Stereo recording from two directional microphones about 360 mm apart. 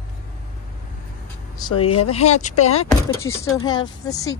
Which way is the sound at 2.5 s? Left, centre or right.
Left.